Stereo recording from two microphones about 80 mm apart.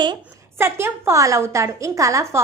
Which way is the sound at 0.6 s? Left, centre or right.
Right.